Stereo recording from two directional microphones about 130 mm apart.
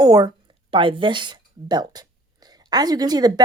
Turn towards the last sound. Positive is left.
turn(degrees=-30)  # may be behind; listen again after turning